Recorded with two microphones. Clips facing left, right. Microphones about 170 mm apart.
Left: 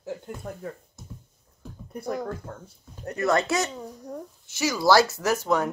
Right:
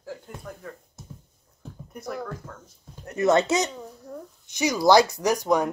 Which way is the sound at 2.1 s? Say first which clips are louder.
Left 3 dB; 20° left (ahead or behind).